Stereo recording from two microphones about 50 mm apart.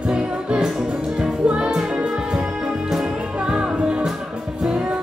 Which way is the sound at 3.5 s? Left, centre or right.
Right.